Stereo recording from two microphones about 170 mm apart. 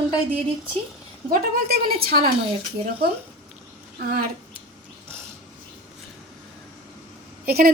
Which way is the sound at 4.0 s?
60° right (ahead or behind).